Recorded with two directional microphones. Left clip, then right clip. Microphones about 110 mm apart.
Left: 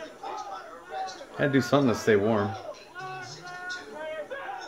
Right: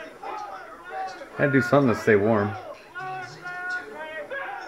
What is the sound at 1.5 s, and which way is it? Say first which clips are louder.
Speech: right 4 dB; 50° right (ahead or behind).